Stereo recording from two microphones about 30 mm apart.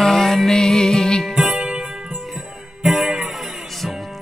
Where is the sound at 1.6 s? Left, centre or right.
Right.